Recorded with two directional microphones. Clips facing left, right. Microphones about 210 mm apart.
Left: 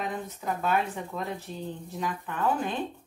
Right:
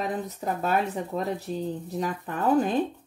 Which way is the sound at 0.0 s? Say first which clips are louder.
Right 4 dB; 40° right (ahead or behind).